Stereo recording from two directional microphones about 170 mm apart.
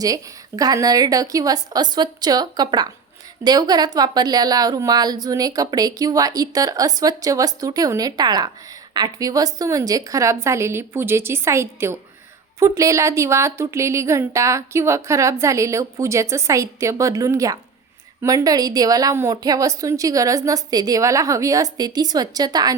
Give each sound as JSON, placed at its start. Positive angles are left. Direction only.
{"t": 0.0, "sound": "a woman's voice", "side_deg": -20}